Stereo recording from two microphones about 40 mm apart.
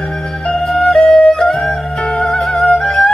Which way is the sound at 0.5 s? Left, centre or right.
Centre.